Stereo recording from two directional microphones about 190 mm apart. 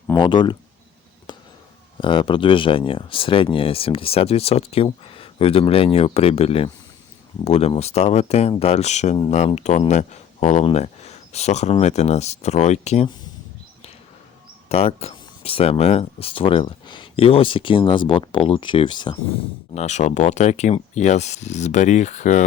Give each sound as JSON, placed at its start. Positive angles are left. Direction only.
{"t": 0.1, "sound": "speech", "side_deg": 25}
{"t": 1.3, "sound": "a sound", "side_deg": 25}
{"t": 2.0, "sound": "speech", "side_deg": 25}
{"t": 14.7, "sound": "speech", "side_deg": 30}
{"t": 19.7, "sound": "speech", "side_deg": 35}